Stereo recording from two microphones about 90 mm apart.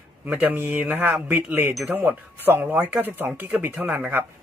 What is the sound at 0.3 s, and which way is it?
Speech, 20° right (ahead or behind).